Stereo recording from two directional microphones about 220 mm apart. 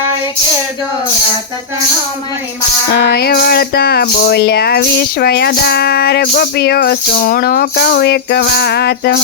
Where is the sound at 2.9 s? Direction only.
50° left (ahead or behind).